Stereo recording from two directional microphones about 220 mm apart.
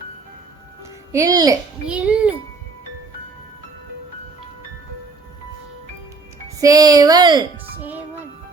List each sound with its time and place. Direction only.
1.1 s speech: 15° right (ahead or behind)
1.9 s a child's voice: 5° right (ahead or behind)
6.6 s speech: 15° right (ahead or behind)
7.8 s music: 10° right (ahead or behind)